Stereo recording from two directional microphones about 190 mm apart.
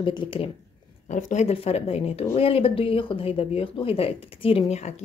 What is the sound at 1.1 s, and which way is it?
A woman's voice, 40° left (ahead or behind).